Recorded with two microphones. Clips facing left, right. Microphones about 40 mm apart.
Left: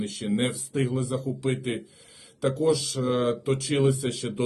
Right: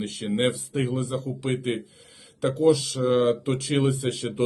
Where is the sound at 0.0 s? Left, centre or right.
Right.